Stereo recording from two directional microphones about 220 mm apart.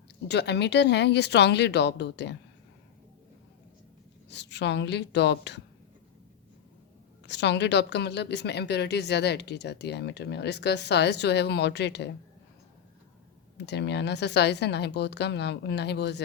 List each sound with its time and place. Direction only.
0.3 s a woman's voice: 50° left (ahead or behind)
4.3 s a woman's voice: 50° left (ahead or behind)
7.3 s a woman's voice: 50° left (ahead or behind)
13.6 s a woman's voice: 50° left (ahead or behind)